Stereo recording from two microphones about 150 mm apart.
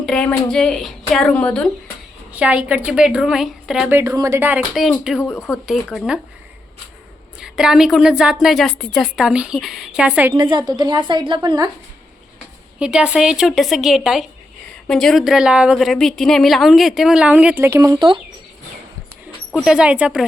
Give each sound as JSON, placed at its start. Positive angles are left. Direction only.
{"t": 0.0, "sound": "a woman's voice", "side_deg": 5}
{"t": 2.3, "sound": "a woman's voice", "side_deg": -10}
{"t": 3.9, "sound": "a woman's voice", "side_deg": -20}
{"t": 4.7, "sound": "a woman's voice", "side_deg": 0}
{"t": 5.2, "sound": "speech", "side_deg": 20}
{"t": 5.6, "sound": "a woman's voice", "side_deg": 0}
{"t": 7.3, "sound": "a woman's voice", "side_deg": -5}
{"t": 10.3, "sound": "a woman's voice", "side_deg": -30}
{"t": 12.8, "sound": "a woman's voice", "side_deg": -5}
{"t": 19.5, "sound": "a woman's voice", "side_deg": 0}